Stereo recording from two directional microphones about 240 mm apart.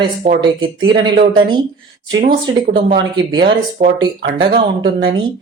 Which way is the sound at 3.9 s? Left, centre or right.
Right.